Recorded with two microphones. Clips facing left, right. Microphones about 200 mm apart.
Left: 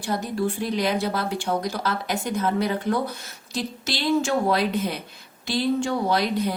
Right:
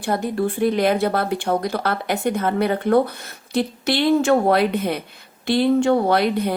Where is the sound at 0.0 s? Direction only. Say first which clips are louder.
Right 4 dB; 55° right (ahead or behind).